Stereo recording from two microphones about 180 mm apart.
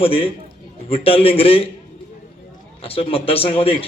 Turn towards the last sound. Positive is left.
turn(degrees=30)  # may be behind; listen again after turning